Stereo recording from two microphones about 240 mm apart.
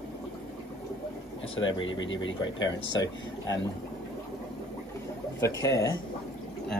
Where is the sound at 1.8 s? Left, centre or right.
Left.